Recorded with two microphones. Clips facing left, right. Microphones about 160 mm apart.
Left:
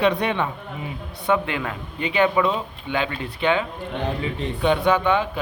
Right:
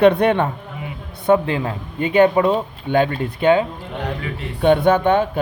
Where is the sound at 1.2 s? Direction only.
40° right (ahead or behind).